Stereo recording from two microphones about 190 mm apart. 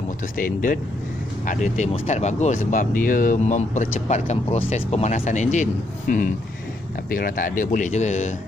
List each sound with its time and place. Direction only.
0.4 s speech: 45° left (ahead or behind)